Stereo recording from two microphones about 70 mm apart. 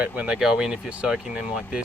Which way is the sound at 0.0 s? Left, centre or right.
Centre.